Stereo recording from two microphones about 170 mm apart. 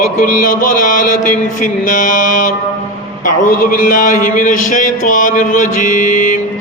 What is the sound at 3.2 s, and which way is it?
A man's voice, 50° left (ahead or behind).